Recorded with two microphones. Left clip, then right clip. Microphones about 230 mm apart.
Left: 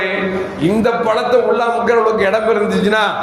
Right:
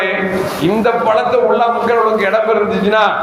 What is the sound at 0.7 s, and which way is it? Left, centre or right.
A man's voice, left.